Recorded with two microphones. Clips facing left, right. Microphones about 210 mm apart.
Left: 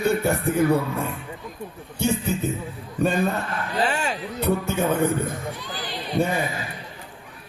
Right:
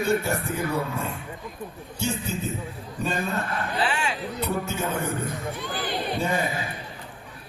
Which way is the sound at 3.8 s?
40° left (ahead or behind).